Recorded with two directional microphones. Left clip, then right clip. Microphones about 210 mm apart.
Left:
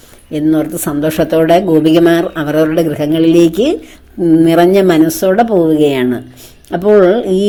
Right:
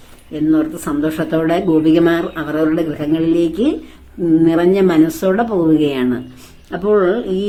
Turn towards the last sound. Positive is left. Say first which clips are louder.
# left 7 dB
turn(degrees=30)  # may be behind; listen again after turning